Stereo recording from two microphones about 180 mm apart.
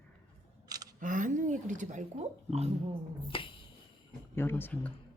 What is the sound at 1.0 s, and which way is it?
A woman's voice, 45° right (ahead or behind).